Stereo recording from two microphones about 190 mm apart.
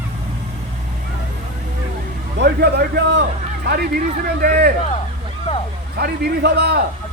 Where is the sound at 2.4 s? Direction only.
60° right (ahead or behind).